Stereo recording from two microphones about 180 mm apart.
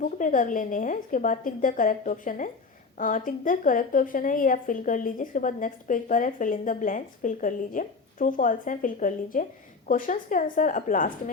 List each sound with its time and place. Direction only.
0.0 s a woman's voice: 50° left (ahead or behind)